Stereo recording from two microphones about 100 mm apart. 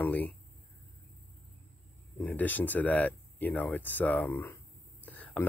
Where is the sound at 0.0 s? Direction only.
15° left (ahead or behind).